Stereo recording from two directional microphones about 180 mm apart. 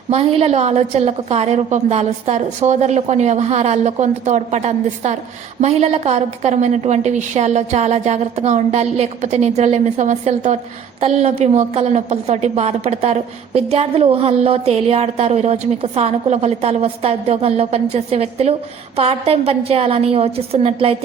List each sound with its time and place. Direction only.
0.1 s a woman's voice: 35° right (ahead or behind)